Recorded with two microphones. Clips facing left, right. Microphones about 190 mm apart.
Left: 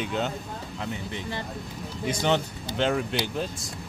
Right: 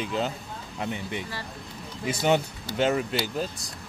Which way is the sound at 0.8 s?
15° right (ahead or behind).